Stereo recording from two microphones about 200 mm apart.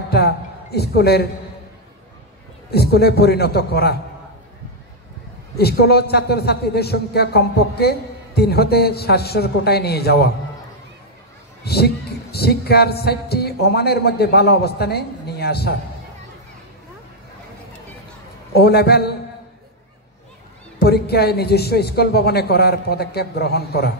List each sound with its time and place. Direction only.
0.1 s a man's voice: 50° left (ahead or behind)
2.7 s speech: 55° left (ahead or behind)
5.6 s speech: 50° left (ahead or behind)
11.6 s speech: 55° left (ahead or behind)
18.5 s speech: 50° left (ahead or behind)
20.8 s speech: 50° left (ahead or behind)